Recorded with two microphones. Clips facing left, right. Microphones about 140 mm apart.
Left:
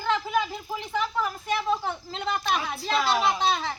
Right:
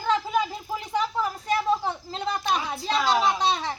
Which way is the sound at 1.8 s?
35° right (ahead or behind).